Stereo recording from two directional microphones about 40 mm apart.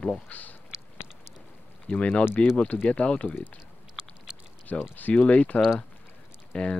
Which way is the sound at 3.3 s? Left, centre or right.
Left.